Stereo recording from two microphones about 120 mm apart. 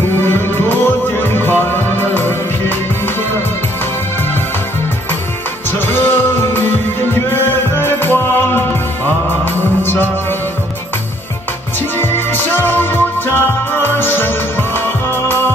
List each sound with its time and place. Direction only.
0.1 s music: 20° left (ahead or behind)
5.7 s music: 20° left (ahead or behind)
12.0 s music: 20° left (ahead or behind)